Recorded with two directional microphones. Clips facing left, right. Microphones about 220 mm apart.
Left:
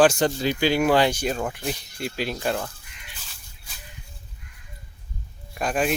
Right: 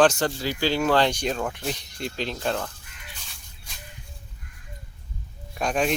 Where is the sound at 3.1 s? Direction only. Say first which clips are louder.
Right 1 dB; centre (ahead or behind).